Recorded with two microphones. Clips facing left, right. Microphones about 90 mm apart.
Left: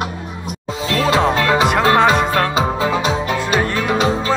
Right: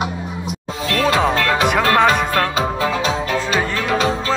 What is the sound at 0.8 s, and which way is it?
Music, 25° left (ahead or behind).